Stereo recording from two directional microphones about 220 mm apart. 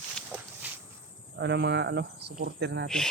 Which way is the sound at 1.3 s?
50° right (ahead or behind).